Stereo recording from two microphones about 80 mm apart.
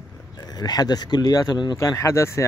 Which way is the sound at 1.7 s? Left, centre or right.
Left.